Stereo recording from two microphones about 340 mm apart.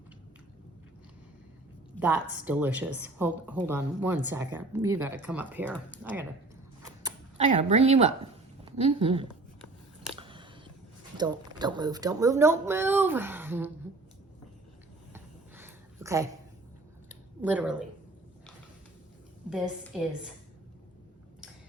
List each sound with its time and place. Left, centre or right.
2.0 s a woman's voice: centre
7.0 s speech: centre
10.2 s a sound: centre
11.2 s speech: centre
15.1 s a sound: centre
17.4 s speech: centre
19.5 s speech: centre